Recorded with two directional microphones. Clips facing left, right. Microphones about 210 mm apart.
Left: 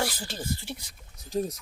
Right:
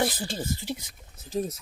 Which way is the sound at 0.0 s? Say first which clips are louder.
Right 4 dB; 20° right (ahead or behind).